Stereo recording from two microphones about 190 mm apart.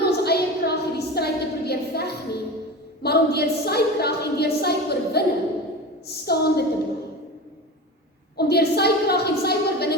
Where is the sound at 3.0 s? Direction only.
55° left (ahead or behind).